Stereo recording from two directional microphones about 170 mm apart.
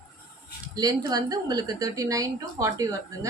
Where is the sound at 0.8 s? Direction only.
20° right (ahead or behind).